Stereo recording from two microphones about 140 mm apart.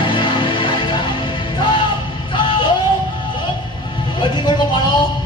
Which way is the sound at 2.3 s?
35° left (ahead or behind).